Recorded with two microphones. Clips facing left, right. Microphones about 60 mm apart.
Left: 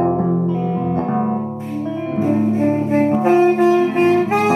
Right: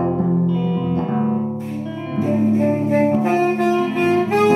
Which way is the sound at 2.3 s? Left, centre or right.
Left.